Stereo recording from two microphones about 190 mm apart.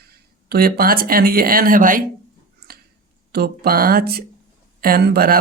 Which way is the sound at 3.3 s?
55° right (ahead or behind).